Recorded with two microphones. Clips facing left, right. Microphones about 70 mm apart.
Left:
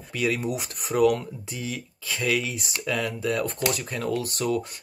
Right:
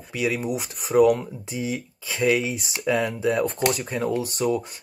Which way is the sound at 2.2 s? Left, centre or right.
Centre.